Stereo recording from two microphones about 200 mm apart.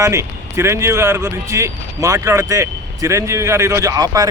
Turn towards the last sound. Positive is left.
turn(degrees=-15)  # may be behind; listen again after turning